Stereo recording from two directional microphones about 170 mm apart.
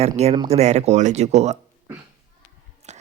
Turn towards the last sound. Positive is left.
turn(degrees=-40)  # may be behind; listen again after turning